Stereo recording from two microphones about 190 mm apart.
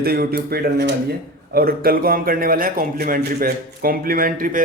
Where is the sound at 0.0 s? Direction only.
55° right (ahead or behind).